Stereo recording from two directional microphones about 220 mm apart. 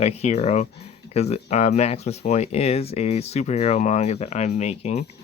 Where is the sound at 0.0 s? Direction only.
30° left (ahead or behind).